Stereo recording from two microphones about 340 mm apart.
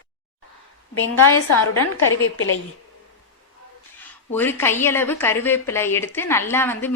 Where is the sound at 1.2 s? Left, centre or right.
Left.